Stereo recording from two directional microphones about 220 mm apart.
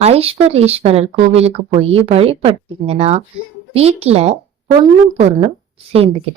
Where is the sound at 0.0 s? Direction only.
25° right (ahead or behind).